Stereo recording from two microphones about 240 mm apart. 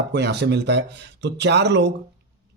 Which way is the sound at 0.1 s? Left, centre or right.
Right.